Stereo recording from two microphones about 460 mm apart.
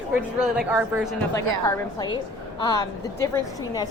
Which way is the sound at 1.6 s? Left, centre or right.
Centre.